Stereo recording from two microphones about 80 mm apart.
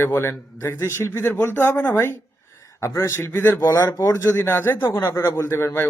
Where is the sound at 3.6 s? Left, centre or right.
Left.